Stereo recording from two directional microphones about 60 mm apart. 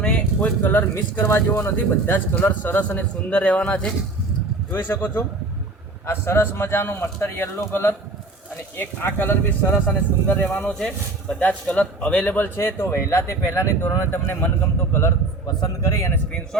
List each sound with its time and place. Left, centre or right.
0.0 s a sound: centre
0.4 s a man's voice: left; by 3.9 s centre
4.7 s speech: left
10.7 s speech: centre
11.3 s a man's voice: left
12.5 s speech: left
14.1 s speech: left
15.6 s speech: left